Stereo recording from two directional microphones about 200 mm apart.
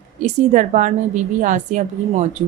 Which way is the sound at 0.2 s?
35° right (ahead or behind).